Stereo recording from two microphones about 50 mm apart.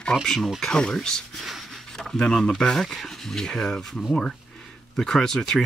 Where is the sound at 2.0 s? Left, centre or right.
Centre.